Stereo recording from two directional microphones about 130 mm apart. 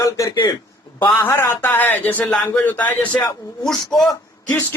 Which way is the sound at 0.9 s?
15° left (ahead or behind).